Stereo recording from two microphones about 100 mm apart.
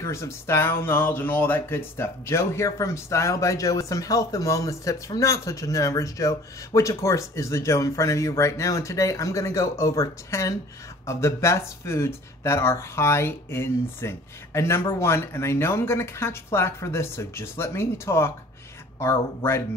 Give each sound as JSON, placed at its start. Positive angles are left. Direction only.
{"t": 0.0, "sound": "speech", "side_deg": 30}